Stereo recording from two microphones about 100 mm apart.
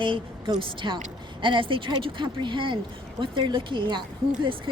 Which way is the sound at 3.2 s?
50° right (ahead or behind).